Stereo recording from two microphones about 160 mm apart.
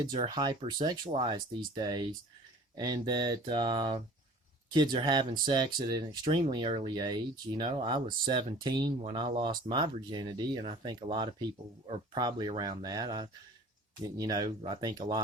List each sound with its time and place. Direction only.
0.0 s speech: 25° right (ahead or behind)